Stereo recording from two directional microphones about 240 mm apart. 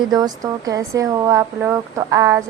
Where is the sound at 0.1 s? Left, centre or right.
Centre.